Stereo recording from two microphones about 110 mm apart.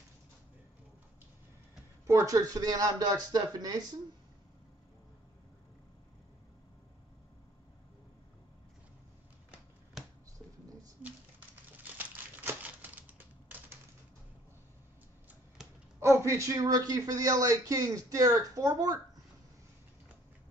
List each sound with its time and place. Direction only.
2.0 s speech: 30° right (ahead or behind)
12.0 s typewriter: 15° right (ahead or behind)
16.3 s speech: 25° right (ahead or behind)